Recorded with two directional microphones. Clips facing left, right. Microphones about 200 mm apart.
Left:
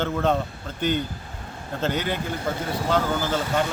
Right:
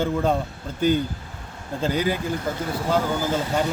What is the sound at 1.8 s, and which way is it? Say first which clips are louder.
Speech: right 3 dB; 10° right (ahead or behind).